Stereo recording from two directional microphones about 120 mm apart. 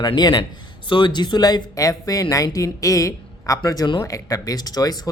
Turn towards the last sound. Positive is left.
turn(degrees=30)  # may be behind; listen again after turning